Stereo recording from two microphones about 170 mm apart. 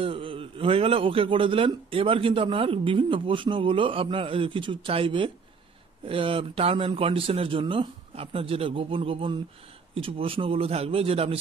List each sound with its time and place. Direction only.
0.0 s a man's voice: 30° right (ahead or behind)